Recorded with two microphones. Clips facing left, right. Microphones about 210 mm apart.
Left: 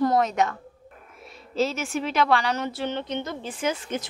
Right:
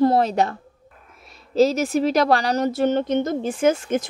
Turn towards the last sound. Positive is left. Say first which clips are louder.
# right 8 dB
turn(degrees=-45)  # may be behind; listen again after turning